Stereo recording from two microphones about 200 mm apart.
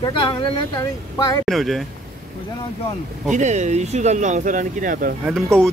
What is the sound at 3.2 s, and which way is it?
Speech, 35° right (ahead or behind).